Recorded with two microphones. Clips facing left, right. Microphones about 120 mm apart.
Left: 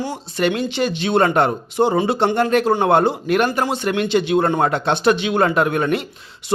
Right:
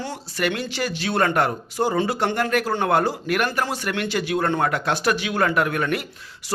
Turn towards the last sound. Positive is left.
turn(degrees=20)  # may be behind; listen again after turning